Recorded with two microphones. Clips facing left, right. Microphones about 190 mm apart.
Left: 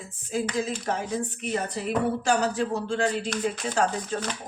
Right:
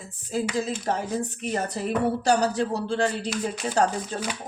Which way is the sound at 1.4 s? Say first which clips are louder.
Right 1 dB; 40° right (ahead or behind).